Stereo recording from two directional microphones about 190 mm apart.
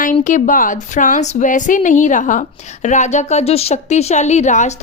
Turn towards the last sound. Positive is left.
turn(degrees=40)  # may be behind; listen again after turning